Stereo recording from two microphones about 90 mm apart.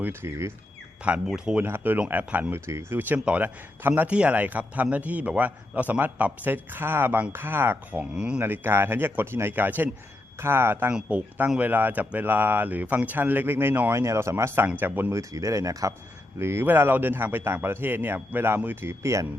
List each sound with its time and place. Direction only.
0.0 s speech: 25° right (ahead or behind)
1.3 s speech: 10° right (ahead or behind)
1.6 s speech: 25° right (ahead or behind)
2.6 s speech: 30° right (ahead or behind); by 8.4 s 10° right (ahead or behind)
8.4 s speech: 25° right (ahead or behind)
10.9 s speech: 15° right (ahead or behind)
14.0 s speech: 35° right (ahead or behind)
15.2 s speech: 35° right (ahead or behind)